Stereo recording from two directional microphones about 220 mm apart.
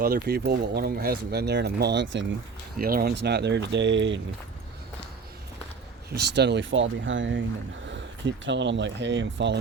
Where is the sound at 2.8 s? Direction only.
40° right (ahead or behind).